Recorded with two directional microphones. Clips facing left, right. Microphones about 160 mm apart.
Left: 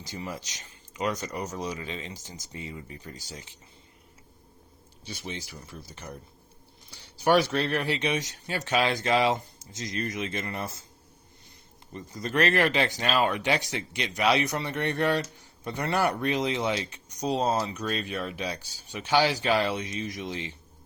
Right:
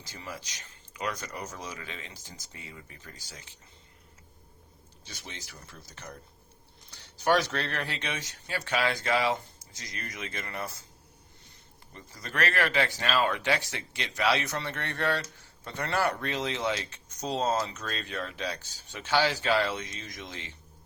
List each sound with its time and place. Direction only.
0.0 s speech: 20° left (ahead or behind)
5.0 s speech: 15° left (ahead or behind)
11.9 s speech: 20° left (ahead or behind)